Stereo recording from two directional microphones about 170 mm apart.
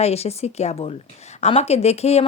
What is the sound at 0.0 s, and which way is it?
Speech, 40° left (ahead or behind).